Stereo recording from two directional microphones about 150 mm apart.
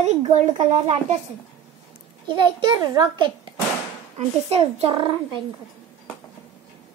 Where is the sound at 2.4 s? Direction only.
30° right (ahead or behind).